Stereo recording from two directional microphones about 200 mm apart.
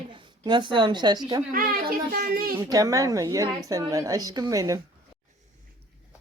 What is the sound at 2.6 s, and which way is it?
A woman's voice, 15° right (ahead or behind).